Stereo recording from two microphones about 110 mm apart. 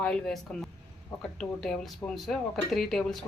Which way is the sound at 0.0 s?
5° left (ahead or behind).